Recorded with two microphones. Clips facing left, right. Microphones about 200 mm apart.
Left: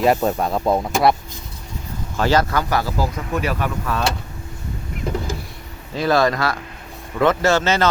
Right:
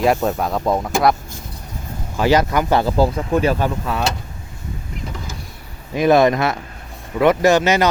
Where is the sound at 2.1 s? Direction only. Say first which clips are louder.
Right 2 dB; 15° right (ahead or behind); by 3.9 s 30° right (ahead or behind).